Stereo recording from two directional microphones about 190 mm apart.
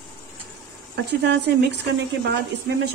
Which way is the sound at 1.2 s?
60° right (ahead or behind).